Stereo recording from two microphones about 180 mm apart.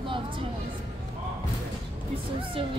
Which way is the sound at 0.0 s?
30° right (ahead or behind).